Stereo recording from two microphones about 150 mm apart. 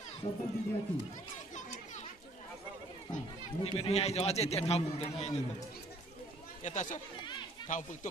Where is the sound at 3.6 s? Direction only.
40° left (ahead or behind).